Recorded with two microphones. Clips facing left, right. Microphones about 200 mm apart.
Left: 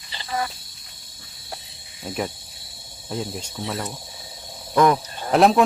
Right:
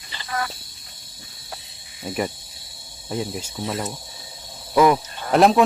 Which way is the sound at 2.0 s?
Centre (ahead or behind).